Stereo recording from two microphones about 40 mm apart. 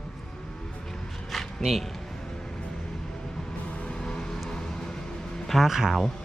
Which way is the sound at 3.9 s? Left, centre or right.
Left.